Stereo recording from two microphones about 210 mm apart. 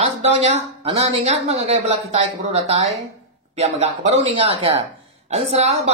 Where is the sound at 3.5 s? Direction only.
30° right (ahead or behind).